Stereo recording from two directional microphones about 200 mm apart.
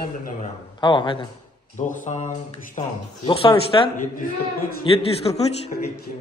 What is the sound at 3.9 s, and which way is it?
Speech, 40° left (ahead or behind).